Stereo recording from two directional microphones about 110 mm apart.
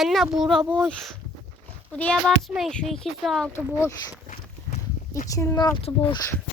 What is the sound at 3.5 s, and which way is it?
Speech, 25° left (ahead or behind).